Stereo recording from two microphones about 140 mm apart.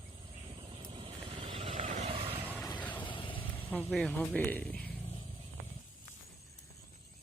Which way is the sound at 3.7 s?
10° left (ahead or behind).